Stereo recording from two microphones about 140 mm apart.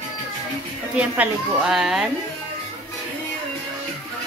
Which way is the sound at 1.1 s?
10° right (ahead or behind).